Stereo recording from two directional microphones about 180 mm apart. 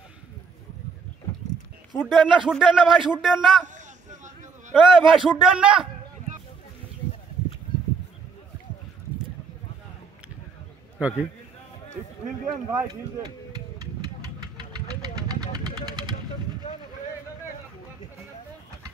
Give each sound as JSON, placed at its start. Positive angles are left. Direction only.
{"t": 2.0, "sound": "speech", "side_deg": 0}
{"t": 3.6, "sound": "a sound", "side_deg": -40}
{"t": 5.0, "sound": "speech", "side_deg": -25}
{"t": 5.3, "sound": "speech", "side_deg": -5}
{"t": 11.0, "sound": "a man's voice", "side_deg": -5}
{"t": 12.8, "sound": "a sound", "side_deg": -20}
{"t": 14.6, "sound": "vehicle", "side_deg": -20}